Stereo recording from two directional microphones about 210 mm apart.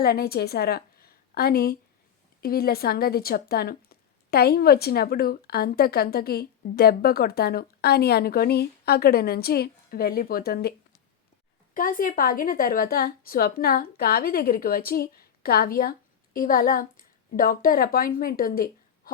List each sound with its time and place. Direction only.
0.0 s a woman's voice: 45° left (ahead or behind)